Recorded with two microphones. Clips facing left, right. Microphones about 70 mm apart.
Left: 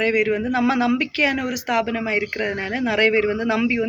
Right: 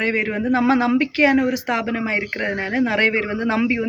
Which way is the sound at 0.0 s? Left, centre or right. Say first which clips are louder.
Left 2 dB; right.